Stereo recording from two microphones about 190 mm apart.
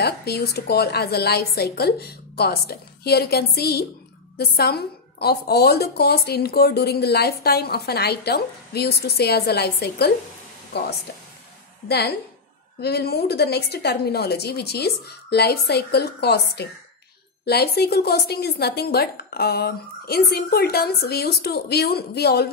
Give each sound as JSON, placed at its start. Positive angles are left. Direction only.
{"t": 0.0, "sound": "a woman's voice", "side_deg": 55}
{"t": 12.8, "sound": "a woman's voice", "side_deg": 55}